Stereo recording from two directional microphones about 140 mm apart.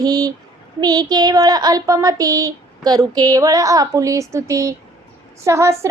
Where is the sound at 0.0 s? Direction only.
25° right (ahead or behind).